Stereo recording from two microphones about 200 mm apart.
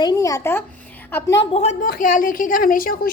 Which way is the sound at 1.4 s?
30° left (ahead or behind).